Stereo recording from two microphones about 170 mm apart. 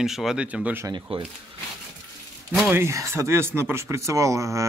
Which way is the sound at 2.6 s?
10° right (ahead or behind).